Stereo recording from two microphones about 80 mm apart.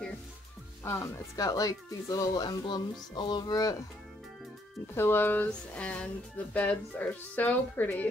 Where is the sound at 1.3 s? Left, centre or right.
Left.